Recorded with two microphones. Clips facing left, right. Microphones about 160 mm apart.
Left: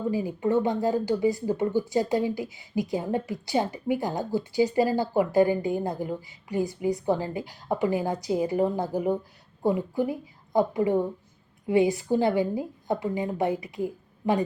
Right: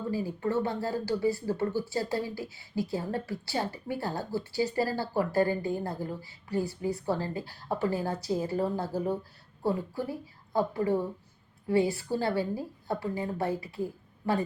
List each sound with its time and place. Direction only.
0.0 s speech: 15° left (ahead or behind)